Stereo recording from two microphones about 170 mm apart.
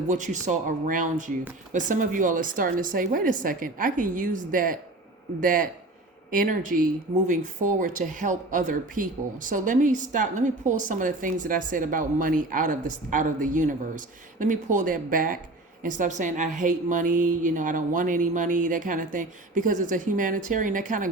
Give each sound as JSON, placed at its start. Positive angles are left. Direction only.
{"t": 0.1, "sound": "speech", "side_deg": -45}